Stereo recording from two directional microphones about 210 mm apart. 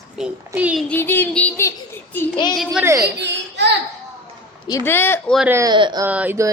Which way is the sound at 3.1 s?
55° right (ahead or behind).